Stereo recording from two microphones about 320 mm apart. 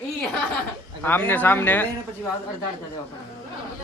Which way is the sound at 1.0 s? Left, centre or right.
Centre.